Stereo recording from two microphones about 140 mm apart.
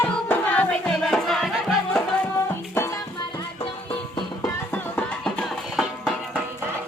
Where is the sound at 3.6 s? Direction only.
40° left (ahead or behind).